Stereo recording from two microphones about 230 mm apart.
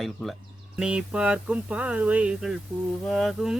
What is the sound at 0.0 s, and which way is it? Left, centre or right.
Speech, centre.